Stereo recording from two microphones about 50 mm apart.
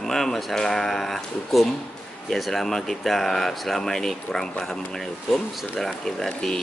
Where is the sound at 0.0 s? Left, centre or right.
Centre.